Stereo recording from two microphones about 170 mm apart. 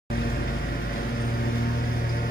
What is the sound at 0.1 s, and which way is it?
Vehicle, 60° left (ahead or behind).